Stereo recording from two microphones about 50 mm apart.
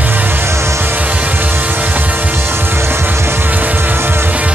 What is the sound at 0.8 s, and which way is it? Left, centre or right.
Music, right.